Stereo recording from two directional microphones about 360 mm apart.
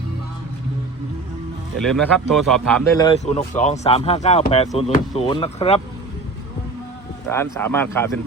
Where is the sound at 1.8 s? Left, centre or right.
Centre.